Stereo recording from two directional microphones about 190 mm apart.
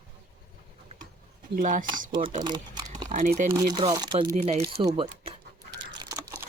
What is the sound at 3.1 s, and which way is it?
Speech, 45° right (ahead or behind).